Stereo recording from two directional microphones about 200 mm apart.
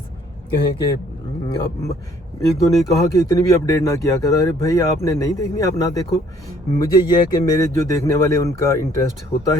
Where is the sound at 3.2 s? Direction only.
15° left (ahead or behind).